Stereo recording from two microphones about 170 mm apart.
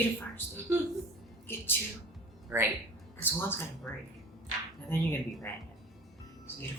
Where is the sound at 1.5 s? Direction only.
10° left (ahead or behind).